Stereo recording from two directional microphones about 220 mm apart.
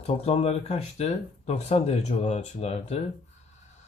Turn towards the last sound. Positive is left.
turn(degrees=30)  # may be behind; listen again after turning